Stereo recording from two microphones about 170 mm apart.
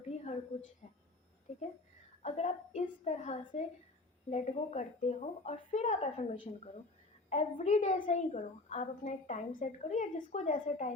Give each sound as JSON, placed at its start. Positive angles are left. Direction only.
{"t": 0.1, "sound": "a woman's voice", "side_deg": 45}
{"t": 2.2, "sound": "a woman's voice", "side_deg": 40}